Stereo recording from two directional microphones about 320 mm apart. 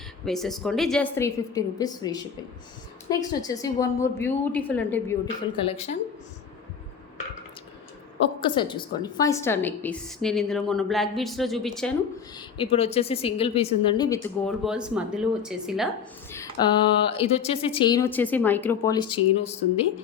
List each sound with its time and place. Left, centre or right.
0.3 s a woman's voice: centre
8.4 s a woman's voice: centre
12.4 s speech: centre
14.6 s a woman's voice: centre
16.3 s speech: centre